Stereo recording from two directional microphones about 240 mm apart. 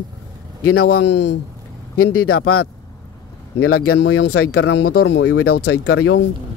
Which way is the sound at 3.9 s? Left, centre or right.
Left.